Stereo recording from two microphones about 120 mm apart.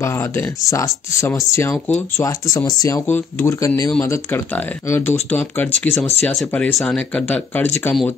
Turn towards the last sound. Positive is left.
turn(degrees=15)  # may be behind; listen again after turning